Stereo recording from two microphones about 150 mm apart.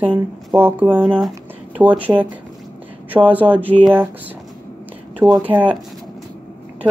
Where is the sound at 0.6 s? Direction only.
15° right (ahead or behind).